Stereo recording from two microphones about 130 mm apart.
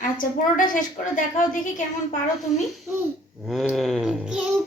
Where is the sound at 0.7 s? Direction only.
90° left.